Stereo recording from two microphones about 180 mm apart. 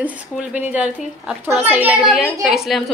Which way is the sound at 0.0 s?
10° right (ahead or behind).